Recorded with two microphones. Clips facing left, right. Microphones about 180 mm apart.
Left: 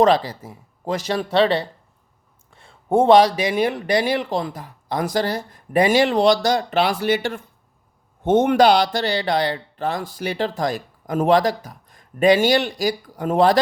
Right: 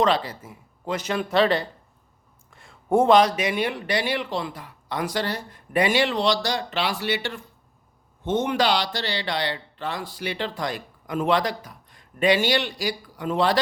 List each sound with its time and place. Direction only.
0.0 s speech: 40° left (ahead or behind)